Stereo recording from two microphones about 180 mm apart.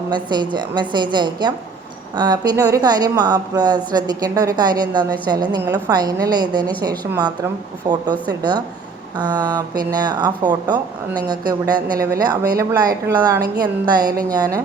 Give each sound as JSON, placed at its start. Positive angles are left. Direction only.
{"t": 0.1, "sound": "speech", "side_deg": -25}